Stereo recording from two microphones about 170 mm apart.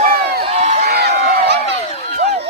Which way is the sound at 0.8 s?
75° right (ahead or behind).